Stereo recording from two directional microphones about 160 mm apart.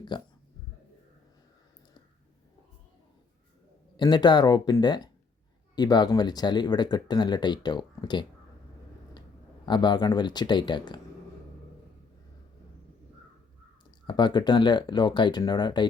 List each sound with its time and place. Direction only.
0.1 s speech: 30° left (ahead or behind)
3.9 s speech: 30° left (ahead or behind)
9.6 s speech: 30° left (ahead or behind)
14.1 s speech: 30° left (ahead or behind)